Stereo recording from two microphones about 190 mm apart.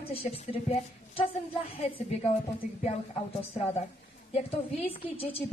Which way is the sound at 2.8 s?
35° left (ahead or behind).